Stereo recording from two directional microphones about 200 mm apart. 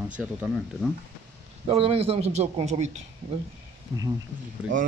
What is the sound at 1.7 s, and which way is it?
A man's voice, 30° right (ahead or behind).